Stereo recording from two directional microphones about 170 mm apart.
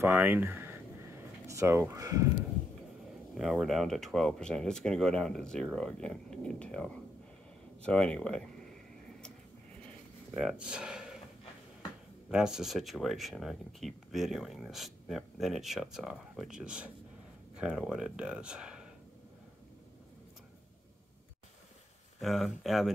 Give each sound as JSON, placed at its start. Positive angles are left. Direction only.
{"t": 0.0, "sound": "speech", "side_deg": -10}
{"t": 3.3, "sound": "speech", "side_deg": 0}
{"t": 10.3, "sound": "speech", "side_deg": -5}
{"t": 12.3, "sound": "speech", "side_deg": -5}
{"t": 22.2, "sound": "speech", "side_deg": 0}